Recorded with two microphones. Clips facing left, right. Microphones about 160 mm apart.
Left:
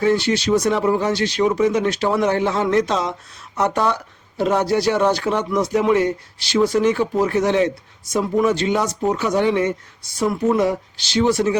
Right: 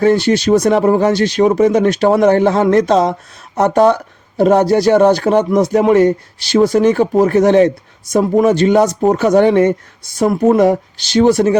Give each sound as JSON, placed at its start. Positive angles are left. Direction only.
{"t": 0.0, "sound": "speech", "side_deg": -50}